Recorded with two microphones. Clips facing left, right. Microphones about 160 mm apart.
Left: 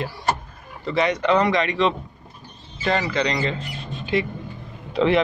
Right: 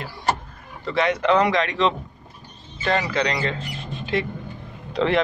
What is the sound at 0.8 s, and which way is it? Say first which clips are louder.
Speech: even; centre (ahead or behind).